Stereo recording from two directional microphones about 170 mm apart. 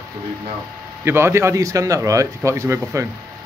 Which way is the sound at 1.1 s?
15° right (ahead or behind).